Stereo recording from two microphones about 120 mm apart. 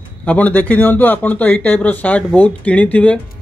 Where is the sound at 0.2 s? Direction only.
10° left (ahead or behind).